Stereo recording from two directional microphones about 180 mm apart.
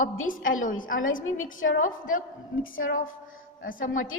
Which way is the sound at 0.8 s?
90° left.